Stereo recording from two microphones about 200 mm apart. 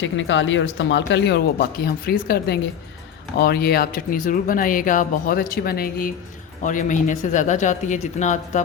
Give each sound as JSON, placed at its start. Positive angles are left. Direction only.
{"t": 0.0, "sound": "speech", "side_deg": 70}